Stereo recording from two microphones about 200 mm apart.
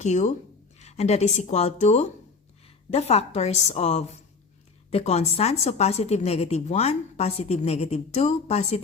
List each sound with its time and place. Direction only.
0.0 s a woman's voice: 35° left (ahead or behind)